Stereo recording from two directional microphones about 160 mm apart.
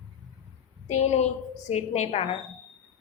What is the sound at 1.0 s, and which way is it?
A woman's voice, 45° left (ahead or behind).